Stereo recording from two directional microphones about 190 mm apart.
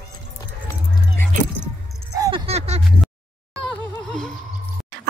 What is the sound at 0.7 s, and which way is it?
Keys jangling, 10° left (ahead or behind).